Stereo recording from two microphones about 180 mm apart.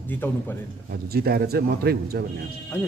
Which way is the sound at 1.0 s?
60° right (ahead or behind).